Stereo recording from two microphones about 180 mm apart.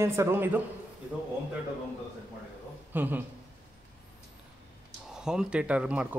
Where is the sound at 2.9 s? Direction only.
10° right (ahead or behind).